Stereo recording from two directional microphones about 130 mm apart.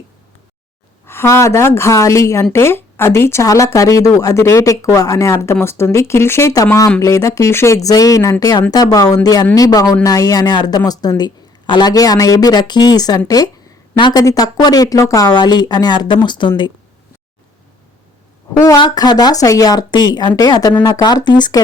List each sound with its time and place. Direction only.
1.0 s speech: 20° left (ahead or behind); by 16.7 s 35° left (ahead or behind)
18.6 s speech: 30° left (ahead or behind)